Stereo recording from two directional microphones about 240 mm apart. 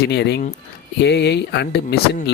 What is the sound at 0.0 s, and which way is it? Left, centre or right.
Speech, left.